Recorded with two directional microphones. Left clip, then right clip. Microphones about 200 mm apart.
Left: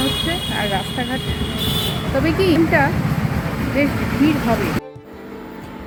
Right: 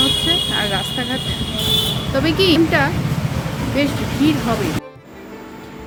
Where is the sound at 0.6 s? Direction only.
10° right (ahead or behind).